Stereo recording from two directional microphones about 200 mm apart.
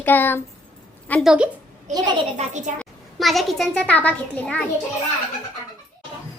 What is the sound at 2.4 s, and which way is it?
Speech, 35° right (ahead or behind).